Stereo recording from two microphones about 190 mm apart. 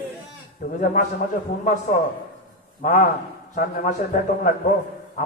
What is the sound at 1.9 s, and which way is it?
A man's voice, 45° left (ahead or behind).